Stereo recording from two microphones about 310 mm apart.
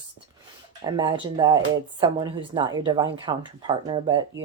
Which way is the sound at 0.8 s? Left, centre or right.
Centre.